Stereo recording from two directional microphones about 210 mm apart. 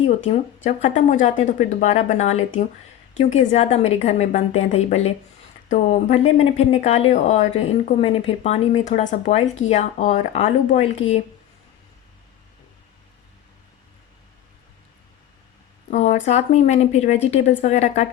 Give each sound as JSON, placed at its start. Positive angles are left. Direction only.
{"t": 0.1, "sound": "speech", "side_deg": 30}
{"t": 15.9, "sound": "speech", "side_deg": 35}